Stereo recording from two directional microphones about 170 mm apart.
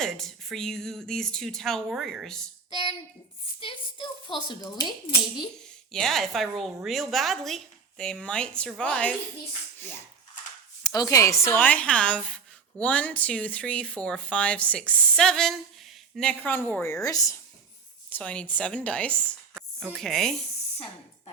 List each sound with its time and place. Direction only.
0.0 s a woman's voice: centre (ahead or behind)
3.6 s speech: 30° left (ahead or behind)
5.9 s a woman's voice: centre (ahead or behind)
10.8 s speech: 20° left (ahead or behind)
16.8 s speech: 20° left (ahead or behind)
18.1 s a woman's voice: 5° left (ahead or behind)